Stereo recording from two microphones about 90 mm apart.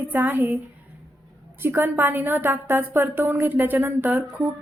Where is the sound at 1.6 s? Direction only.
25° right (ahead or behind).